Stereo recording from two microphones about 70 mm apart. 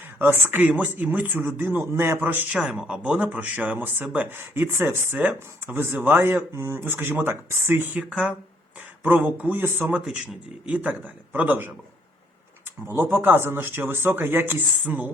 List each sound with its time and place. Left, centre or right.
0.2 s a man's voice: right
2.5 s speech: centre
3.3 s a man's voice: right
6.6 s speech: right
6.8 s speech: right
7.9 s speech: centre
9.0 s a man's voice: right
10.7 s a man's voice: centre
13.0 s speech: right